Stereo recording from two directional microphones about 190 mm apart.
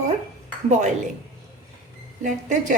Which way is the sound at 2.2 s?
40° right (ahead or behind).